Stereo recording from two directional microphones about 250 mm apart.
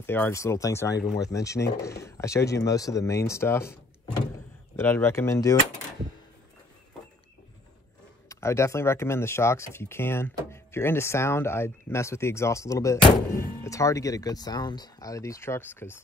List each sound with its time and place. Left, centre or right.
0.0 s speech: centre
8.3 s speech: centre